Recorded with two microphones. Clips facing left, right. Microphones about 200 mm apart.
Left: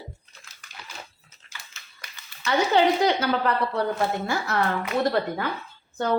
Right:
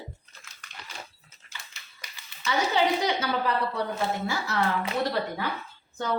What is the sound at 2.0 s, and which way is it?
Speech, 55° left (ahead or behind).